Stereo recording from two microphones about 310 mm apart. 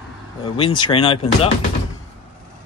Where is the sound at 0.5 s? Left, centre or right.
Centre.